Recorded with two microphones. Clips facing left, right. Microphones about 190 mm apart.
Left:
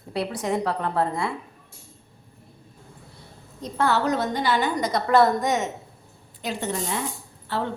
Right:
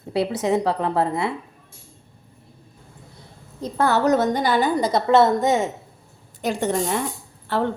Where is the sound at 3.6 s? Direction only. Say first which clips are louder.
Right 3 dB; 40° right (ahead or behind).